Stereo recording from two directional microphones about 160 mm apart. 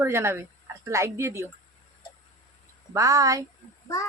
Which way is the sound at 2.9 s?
20° right (ahead or behind).